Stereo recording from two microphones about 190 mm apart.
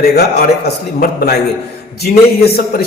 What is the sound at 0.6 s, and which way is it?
A man's voice, 55° left (ahead or behind).